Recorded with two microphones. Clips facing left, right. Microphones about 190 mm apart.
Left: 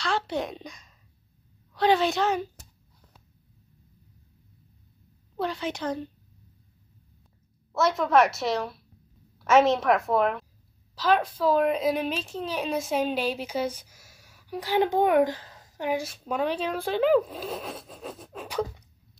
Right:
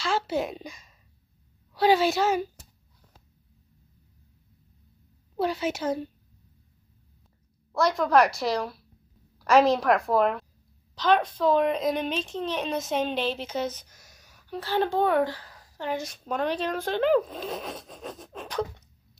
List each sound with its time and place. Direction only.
0.0 s a woman's voice: 5° right (ahead or behind)
5.3 s a woman's voice: 10° right (ahead or behind)
7.7 s a woman's voice: 5° left (ahead or behind)